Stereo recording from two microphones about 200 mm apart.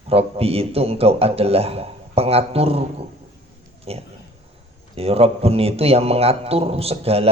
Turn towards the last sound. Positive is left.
turn(degrees=-30)  # may be behind; listen again after turning